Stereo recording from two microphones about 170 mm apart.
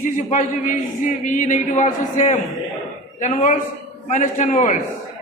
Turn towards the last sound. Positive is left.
turn(degrees=45)  # may be behind; listen again after turning